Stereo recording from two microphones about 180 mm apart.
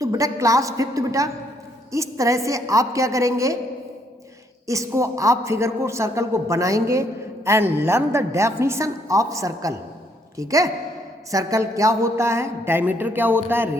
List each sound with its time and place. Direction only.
0.0 s a man's voice: 20° right (ahead or behind)
4.6 s a man's voice: 15° right (ahead or behind)